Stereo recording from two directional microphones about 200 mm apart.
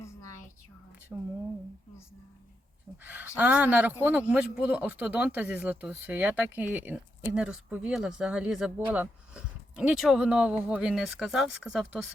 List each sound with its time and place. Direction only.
0.0 s a sound: 15° left (ahead or behind)
1.1 s speech: 5° right (ahead or behind)
3.0 s speech: 10° right (ahead or behind)